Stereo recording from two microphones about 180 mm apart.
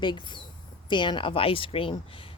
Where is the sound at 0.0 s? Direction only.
25° left (ahead or behind).